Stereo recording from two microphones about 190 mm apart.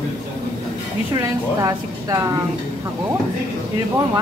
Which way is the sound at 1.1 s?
20° right (ahead or behind).